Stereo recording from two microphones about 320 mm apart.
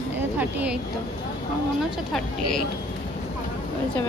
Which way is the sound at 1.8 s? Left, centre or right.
Centre.